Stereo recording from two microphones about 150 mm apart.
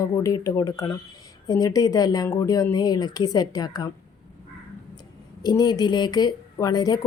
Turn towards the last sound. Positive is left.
turn(degrees=25)  # may be behind; listen again after turning